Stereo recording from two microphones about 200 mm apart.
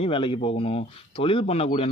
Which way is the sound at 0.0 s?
25° left (ahead or behind).